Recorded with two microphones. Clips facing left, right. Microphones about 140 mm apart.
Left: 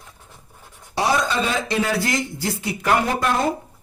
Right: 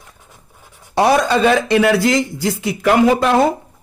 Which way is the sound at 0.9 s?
60° right (ahead or behind).